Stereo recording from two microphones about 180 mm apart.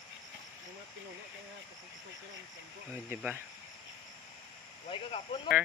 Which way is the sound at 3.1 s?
10° right (ahead or behind).